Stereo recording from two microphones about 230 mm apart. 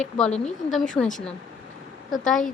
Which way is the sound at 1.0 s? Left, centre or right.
Centre.